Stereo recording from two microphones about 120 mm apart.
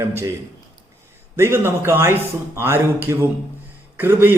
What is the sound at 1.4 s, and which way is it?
A man's voice, 20° right (ahead or behind).